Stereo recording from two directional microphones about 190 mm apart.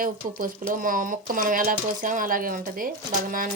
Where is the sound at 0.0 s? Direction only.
45° right (ahead or behind).